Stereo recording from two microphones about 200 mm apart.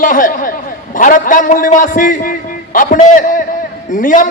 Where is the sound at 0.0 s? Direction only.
40° left (ahead or behind).